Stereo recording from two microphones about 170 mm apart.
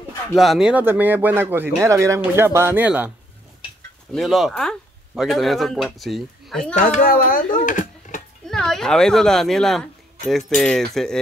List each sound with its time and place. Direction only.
0.3 s speech: centre (ahead or behind)
4.1 s speech: centre (ahead or behind)
6.9 s speech: 55° left (ahead or behind)
8.5 s speech: centre (ahead or behind)